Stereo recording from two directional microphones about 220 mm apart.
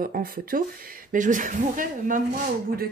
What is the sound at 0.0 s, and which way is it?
Speech, 40° right (ahead or behind).